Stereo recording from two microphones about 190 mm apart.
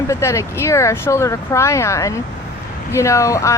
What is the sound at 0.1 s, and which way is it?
Speech, 15° left (ahead or behind).